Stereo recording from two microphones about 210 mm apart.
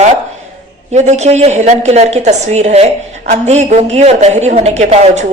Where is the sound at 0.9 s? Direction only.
35° right (ahead or behind).